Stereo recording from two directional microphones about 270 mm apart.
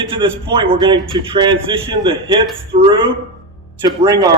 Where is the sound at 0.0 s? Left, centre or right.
Centre.